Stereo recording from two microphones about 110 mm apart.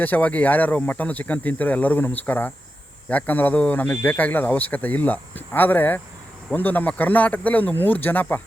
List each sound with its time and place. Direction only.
0.0 s speech: 15° left (ahead or behind)